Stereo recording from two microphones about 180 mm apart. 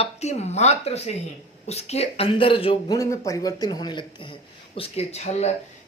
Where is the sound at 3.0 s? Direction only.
20° left (ahead or behind).